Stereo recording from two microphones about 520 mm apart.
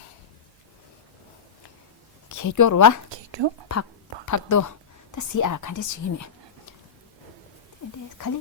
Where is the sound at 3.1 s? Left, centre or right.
Right.